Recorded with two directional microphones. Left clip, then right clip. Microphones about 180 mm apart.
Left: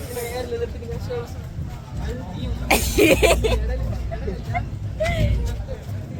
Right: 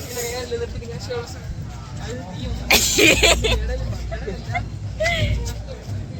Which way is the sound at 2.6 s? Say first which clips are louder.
Right 2 dB; 20° left (ahead or behind).